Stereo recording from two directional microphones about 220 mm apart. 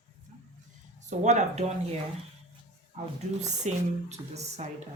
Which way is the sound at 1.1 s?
30° right (ahead or behind).